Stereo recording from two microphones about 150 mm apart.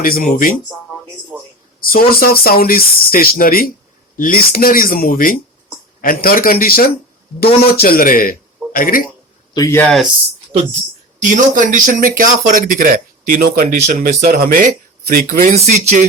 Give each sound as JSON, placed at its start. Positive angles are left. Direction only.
{"t": 0.0, "sound": "speech", "side_deg": 75}
{"t": 1.3, "sound": "a sound", "side_deg": -10}
{"t": 1.9, "sound": "speech", "side_deg": 75}
{"t": 9.6, "sound": "speech", "side_deg": 15}
{"t": 9.8, "sound": "speech", "side_deg": 0}
{"t": 11.2, "sound": "speech", "side_deg": -60}